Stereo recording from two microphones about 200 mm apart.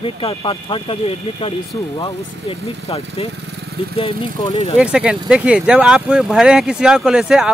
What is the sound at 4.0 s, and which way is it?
Speech, 30° left (ahead or behind).